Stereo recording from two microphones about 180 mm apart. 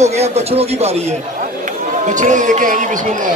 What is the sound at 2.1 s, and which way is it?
Speech, 45° right (ahead or behind).